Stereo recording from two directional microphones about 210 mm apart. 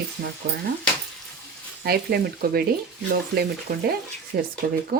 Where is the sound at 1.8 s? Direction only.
45° right (ahead or behind).